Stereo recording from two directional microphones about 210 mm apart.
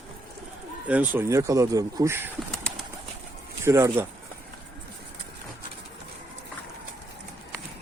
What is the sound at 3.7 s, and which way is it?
Speech, 15° right (ahead or behind).